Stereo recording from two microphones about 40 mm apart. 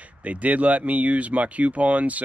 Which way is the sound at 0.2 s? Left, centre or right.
Right.